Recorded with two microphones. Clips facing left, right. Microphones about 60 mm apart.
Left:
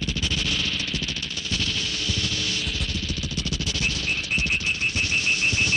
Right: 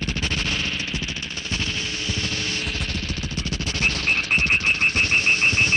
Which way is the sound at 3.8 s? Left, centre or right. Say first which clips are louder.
Right 7 dB; right.